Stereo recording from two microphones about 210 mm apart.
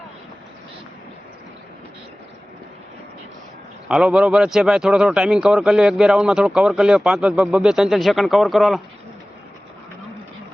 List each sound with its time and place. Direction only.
3.8 s speech: 5° right (ahead or behind)